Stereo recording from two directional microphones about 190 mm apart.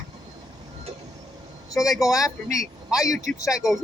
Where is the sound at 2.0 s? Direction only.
15° left (ahead or behind).